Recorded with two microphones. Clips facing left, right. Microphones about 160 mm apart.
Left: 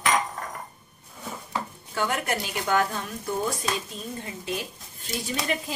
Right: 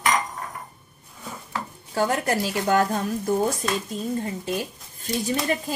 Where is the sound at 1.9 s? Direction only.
35° right (ahead or behind).